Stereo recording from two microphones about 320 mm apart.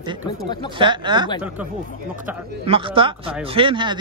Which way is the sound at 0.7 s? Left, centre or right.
Centre.